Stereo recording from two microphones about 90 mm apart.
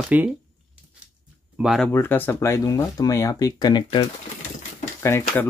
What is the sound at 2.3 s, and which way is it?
Speech, 35° left (ahead or behind).